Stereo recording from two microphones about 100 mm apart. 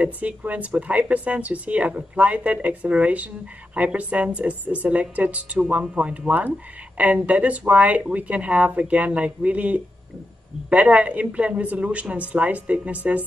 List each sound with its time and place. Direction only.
0.0 s speech: 15° right (ahead or behind)